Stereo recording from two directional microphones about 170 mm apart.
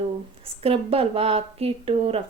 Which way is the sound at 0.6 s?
35° right (ahead or behind).